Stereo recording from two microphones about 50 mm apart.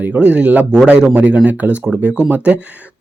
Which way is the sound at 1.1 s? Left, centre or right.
Right.